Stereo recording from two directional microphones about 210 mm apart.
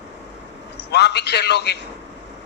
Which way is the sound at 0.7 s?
55° left (ahead or behind).